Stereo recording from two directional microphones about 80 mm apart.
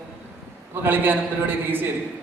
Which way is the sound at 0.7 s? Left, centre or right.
Right.